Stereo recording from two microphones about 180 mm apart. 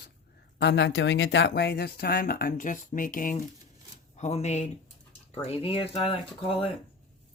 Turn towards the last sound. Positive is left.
turn(degrees=30)  # may be behind; listen again after turning